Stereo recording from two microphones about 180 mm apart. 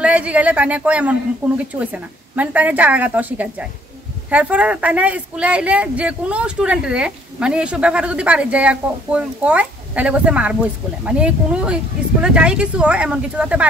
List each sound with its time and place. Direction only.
0.0 s a woman's voice: 5° right (ahead or behind)